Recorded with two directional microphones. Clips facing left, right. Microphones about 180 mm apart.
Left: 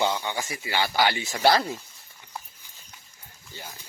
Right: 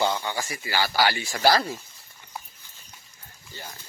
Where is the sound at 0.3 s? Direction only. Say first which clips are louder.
Even; 20° left (ahead or behind).